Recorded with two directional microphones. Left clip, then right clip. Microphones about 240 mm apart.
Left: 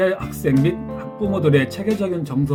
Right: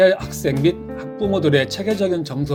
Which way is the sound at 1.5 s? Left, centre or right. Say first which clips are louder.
Right 1 dB; right.